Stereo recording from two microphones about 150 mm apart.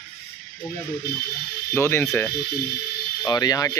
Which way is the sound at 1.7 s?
15° left (ahead or behind).